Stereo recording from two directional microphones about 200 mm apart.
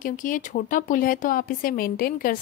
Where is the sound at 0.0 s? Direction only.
40° left (ahead or behind).